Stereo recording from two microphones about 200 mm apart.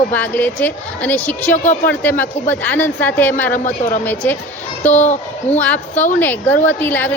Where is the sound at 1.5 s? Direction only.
35° left (ahead or behind).